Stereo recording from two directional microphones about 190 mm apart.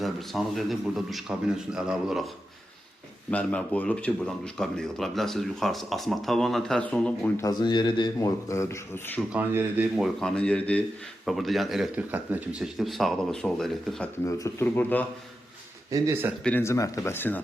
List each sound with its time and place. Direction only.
0.0 s speech: centre (ahead or behind)
3.3 s speech: 5° left (ahead or behind)
7.4 s a man's voice: 20° left (ahead or behind)
9.3 s speech: 10° right (ahead or behind)
9.9 s speech: centre (ahead or behind)
14.3 s speech: 15° left (ahead or behind)
15.9 s speech: 15° right (ahead or behind)
16.4 s speech: 10° left (ahead or behind)